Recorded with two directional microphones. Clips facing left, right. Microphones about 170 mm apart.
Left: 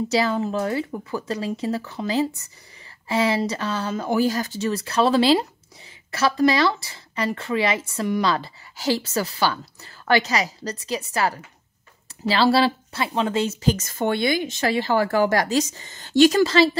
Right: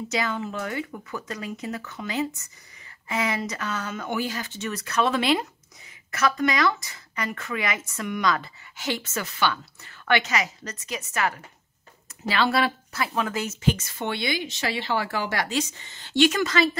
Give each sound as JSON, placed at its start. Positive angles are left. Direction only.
{"t": 0.1, "sound": "speech", "side_deg": 35}